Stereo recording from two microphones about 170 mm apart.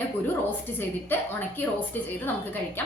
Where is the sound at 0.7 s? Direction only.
10° left (ahead or behind).